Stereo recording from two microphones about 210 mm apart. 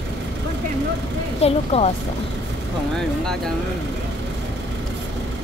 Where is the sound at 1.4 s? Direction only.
30° left (ahead or behind).